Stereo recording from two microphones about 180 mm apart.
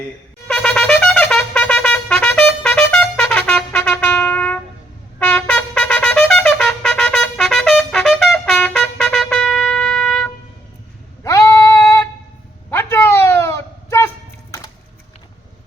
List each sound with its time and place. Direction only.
0.4 s shofar: 5° left (ahead or behind)
5.2 s trumpet: 10° left (ahead or behind)
11.2 s female singing: 15° left (ahead or behind)
12.7 s a sound: 15° left (ahead or behind)